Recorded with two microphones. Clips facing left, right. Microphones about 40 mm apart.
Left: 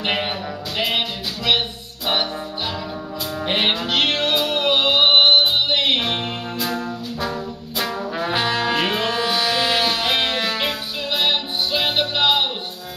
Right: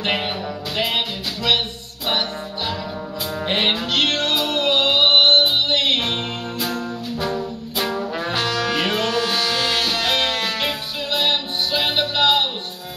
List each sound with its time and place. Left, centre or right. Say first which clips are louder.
0.0 s music: even; centre
3.4 s music: even; centre
7.8 s brass instrument: even; centre
8.4 s brass instrument: left 1 dB; left
8.6 s music: even; centre
9.3 s a sound: left 1 dB; centre
9.6 s music: left 2 dB; left
9.8 s music: even; centre